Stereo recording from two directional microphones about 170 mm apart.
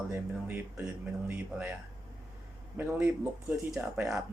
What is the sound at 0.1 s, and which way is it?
Speech, 10° right (ahead or behind).